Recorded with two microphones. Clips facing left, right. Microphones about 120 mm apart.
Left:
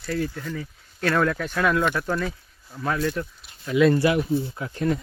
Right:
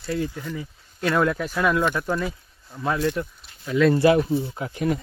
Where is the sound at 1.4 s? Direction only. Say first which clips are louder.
Right 1 dB; 5° right (ahead or behind).